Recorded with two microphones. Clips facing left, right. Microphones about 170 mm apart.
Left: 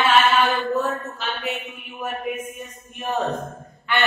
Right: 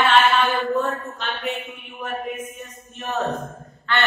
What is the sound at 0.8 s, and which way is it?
Mantra, 5° left (ahead or behind).